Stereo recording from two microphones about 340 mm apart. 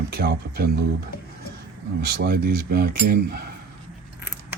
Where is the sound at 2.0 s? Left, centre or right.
Right.